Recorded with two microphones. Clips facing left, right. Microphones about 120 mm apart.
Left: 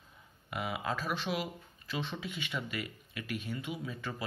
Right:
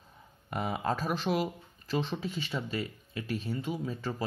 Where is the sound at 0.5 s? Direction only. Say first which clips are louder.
Right 4 dB; 40° right (ahead or behind).